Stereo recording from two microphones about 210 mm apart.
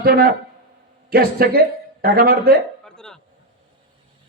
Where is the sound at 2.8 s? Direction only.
5° left (ahead or behind).